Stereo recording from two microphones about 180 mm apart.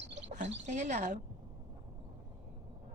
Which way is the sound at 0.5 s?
40° right (ahead or behind).